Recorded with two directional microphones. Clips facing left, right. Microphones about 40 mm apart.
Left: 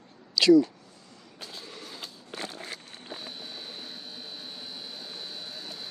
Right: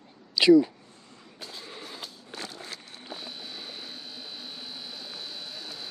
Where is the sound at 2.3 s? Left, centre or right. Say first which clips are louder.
Left 2 dB; left.